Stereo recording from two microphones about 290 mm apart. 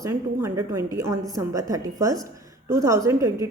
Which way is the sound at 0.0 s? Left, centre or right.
Centre.